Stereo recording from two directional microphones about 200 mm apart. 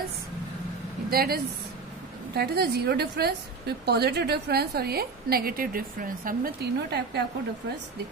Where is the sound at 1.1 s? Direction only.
50° right (ahead or behind).